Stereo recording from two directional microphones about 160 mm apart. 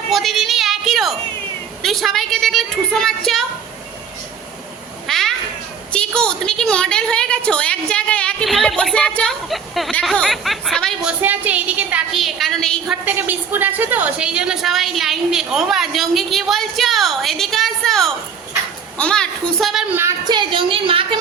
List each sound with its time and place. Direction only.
0.1 s a sound: centre (ahead or behind)
1.8 s a woman's voice: centre (ahead or behind)
5.0 s cat: centre (ahead or behind)
5.9 s a woman's voice: 5° left (ahead or behind)
11.2 s a woman's voice: 10° right (ahead or behind)
13.1 s a woman's voice: 10° right (ahead or behind)
19.9 s a woman's voice: 15° right (ahead or behind)
20.2 s a woman's voice: 30° right (ahead or behind)